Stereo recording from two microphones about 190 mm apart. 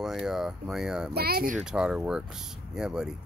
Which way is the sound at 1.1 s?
55° right (ahead or behind).